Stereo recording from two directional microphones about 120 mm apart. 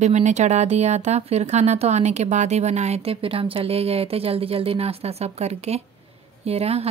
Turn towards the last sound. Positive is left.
turn(degrees=-60)  # may be behind; listen again after turning